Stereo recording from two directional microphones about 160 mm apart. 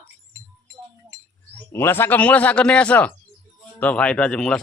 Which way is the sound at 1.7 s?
15° left (ahead or behind).